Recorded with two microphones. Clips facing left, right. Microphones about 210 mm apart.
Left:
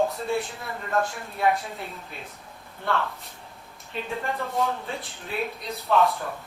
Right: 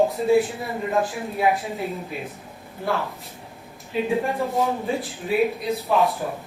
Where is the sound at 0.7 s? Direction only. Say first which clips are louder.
Right 4 dB; 15° right (ahead or behind).